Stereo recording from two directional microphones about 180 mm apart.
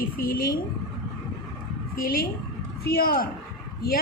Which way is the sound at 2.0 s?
55° left (ahead or behind).